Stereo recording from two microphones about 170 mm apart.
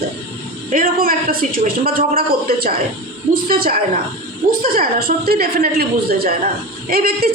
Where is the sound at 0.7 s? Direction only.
55° right (ahead or behind).